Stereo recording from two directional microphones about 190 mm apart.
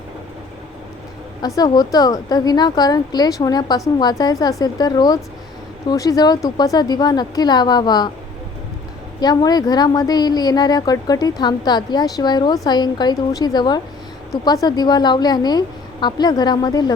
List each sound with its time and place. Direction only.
1.4 s a woman's voice: 20° left (ahead or behind)
9.2 s a woman's voice: 20° left (ahead or behind)